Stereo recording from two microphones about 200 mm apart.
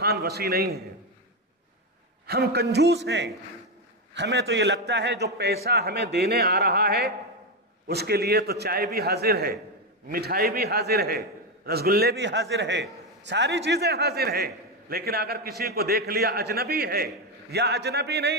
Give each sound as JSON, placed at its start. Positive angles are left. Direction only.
{"t": 0.0, "sound": "a man's voice", "side_deg": -50}
{"t": 2.2, "sound": "a man's voice", "side_deg": -55}